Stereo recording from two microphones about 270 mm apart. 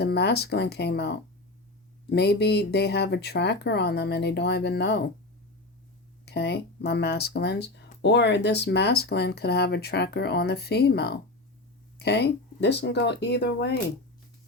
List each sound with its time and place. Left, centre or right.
0.0 s speech: left
6.2 s speech: left